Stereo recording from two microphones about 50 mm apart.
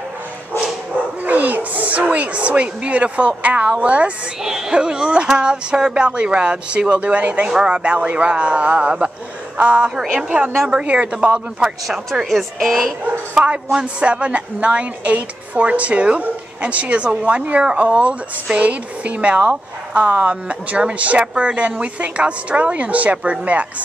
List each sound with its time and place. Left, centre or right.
1.2 s speech: right
4.4 s music: centre
4.7 s speech: centre
12.3 s speech: centre
13.3 s speech: right